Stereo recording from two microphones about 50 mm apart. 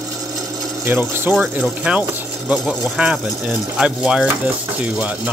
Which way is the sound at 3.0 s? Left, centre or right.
Centre.